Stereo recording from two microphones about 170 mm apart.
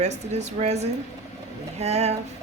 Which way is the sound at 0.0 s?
40° right (ahead or behind).